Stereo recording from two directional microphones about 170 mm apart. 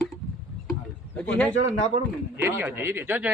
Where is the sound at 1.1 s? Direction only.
10° left (ahead or behind).